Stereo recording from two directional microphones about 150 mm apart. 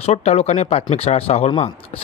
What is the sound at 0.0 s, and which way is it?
Speech, 45° left (ahead or behind).